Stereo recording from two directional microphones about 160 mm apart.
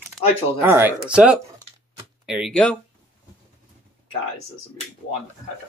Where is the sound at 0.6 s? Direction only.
15° right (ahead or behind).